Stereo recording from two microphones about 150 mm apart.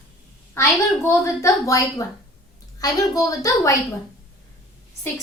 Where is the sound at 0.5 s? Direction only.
20° left (ahead or behind).